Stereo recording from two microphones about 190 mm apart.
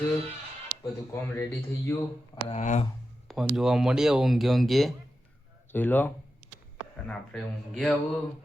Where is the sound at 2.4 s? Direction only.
35° left (ahead or behind).